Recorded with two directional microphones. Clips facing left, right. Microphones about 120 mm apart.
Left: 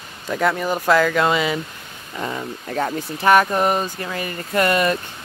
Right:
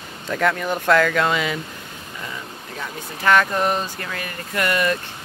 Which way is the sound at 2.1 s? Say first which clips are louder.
Left 8 dB; 50° left (ahead or behind).